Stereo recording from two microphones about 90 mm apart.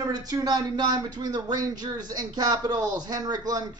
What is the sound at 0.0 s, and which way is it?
Speech, 45° right (ahead or behind).